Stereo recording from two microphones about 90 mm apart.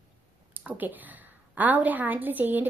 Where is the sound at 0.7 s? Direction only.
20° right (ahead or behind).